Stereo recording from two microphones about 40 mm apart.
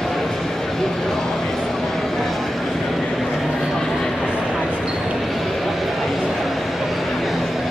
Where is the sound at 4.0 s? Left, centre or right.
Centre.